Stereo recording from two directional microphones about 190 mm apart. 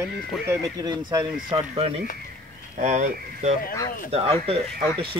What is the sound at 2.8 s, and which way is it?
Speech, 40° right (ahead or behind).